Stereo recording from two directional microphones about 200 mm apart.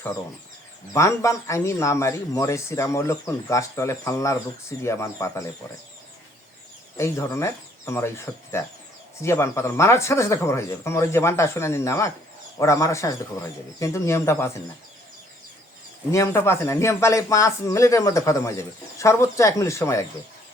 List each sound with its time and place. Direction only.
0.9 s speech: 15° left (ahead or behind)
6.9 s speech: 15° left (ahead or behind)
16.1 s speech: 15° left (ahead or behind)